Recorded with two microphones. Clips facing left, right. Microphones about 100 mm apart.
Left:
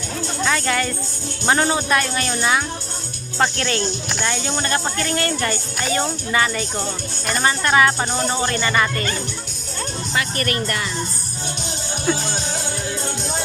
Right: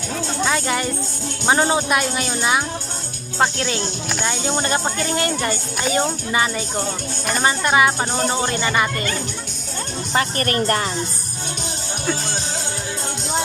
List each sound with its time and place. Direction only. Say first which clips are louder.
0.4 s speech: left 1 dB; 20° right (ahead or behind)
10.2 s a woman's voice: right 3 dB; 35° right (ahead or behind)